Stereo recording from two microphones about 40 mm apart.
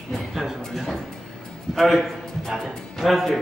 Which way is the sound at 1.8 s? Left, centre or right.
Centre.